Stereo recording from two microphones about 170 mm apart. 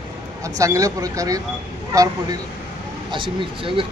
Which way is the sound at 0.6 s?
20° right (ahead or behind).